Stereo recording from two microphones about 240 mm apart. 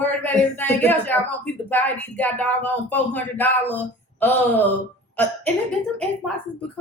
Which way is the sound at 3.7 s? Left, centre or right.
Centre.